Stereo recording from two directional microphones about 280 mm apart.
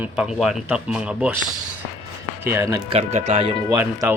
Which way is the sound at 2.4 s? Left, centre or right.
Centre.